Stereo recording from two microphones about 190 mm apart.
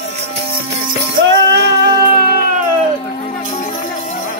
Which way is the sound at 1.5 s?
65° right (ahead or behind).